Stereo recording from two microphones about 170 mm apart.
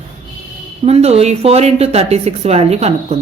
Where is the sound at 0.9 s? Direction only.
35° right (ahead or behind).